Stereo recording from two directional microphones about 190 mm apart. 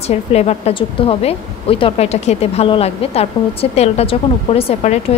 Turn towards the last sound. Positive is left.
turn(degrees=35)  # may be behind; listen again after turning